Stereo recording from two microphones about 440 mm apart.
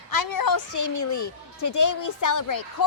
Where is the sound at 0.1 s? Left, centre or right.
Left.